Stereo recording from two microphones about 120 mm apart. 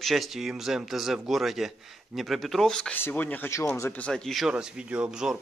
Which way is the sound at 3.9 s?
5° left (ahead or behind).